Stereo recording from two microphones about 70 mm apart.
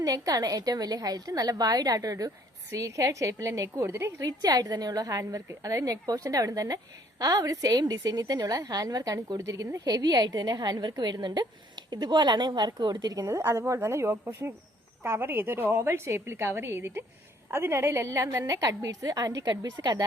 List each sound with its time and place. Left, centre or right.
0.0 s a woman's voice: right
4.2 s a woman's voice: right
9.8 s a woman's voice: right